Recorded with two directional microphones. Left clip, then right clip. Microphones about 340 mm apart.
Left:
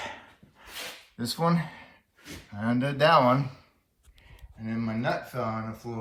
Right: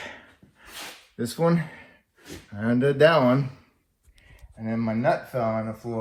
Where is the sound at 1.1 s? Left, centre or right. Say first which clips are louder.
Right 4 dB; centre.